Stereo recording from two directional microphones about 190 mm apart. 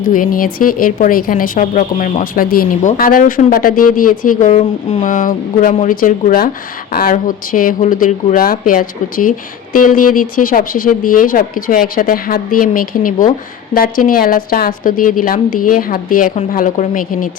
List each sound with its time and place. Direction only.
0.0 s speech: 45° left (ahead or behind)